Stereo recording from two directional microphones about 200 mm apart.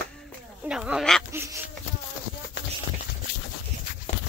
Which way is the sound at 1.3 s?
15° right (ahead or behind).